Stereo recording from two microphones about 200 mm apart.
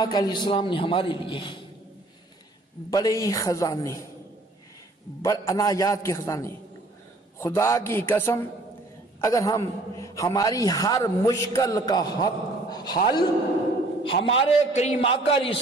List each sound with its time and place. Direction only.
0.0 s a man's voice: 20° left (ahead or behind)
2.9 s a man's voice: 20° left (ahead or behind)
5.2 s a man's voice: 15° left (ahead or behind)
14.0 s a man's voice: 30° left (ahead or behind)